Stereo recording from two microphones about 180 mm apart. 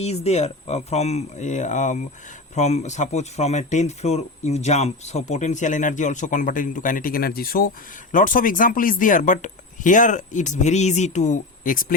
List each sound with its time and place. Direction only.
0.0 s speech: 35° left (ahead or behind)